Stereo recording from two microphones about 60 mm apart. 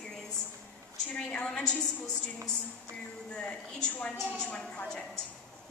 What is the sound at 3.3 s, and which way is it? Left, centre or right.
A woman's voice, centre.